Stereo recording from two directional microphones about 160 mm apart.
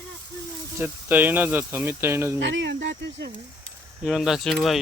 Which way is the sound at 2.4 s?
90° right.